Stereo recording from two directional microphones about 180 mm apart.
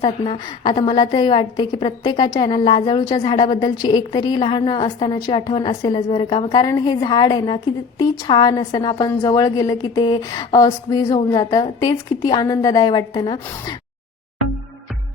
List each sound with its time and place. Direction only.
0.0 s a woman's voice: 25° left (ahead or behind)